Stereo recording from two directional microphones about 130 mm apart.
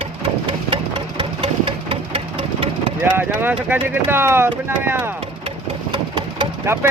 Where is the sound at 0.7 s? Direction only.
40° right (ahead or behind).